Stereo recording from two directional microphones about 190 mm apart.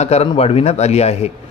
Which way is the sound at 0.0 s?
35° left (ahead or behind).